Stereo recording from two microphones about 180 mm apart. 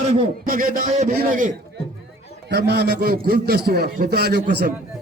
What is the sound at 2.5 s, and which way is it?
A man's voice, 70° right (ahead or behind).